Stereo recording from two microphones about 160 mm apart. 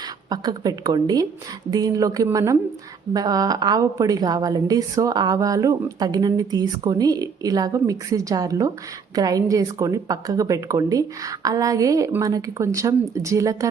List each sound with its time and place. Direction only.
0.0 s a woman's voice: 25° right (ahead or behind)